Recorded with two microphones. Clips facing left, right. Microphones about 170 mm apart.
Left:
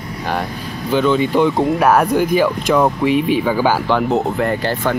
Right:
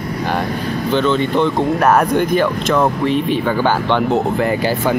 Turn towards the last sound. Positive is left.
turn(degrees=-5)  # may be behind; listen again after turning